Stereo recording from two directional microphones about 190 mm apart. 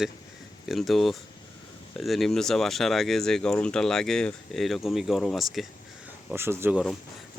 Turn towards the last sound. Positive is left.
turn(degrees=-10)  # may be behind; listen again after turning